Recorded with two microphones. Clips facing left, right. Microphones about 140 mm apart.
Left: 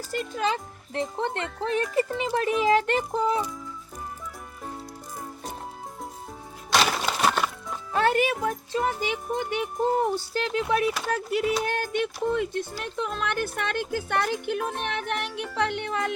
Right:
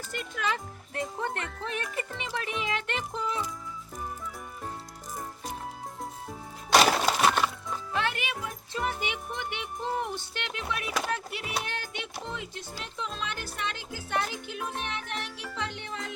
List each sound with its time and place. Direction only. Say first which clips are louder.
0.1 s a child's voice: left 5 dB; 35° left (ahead or behind)
7.9 s a child's voice: left 10 dB; 40° left (ahead or behind); by 16.1 s 65° left (ahead or behind)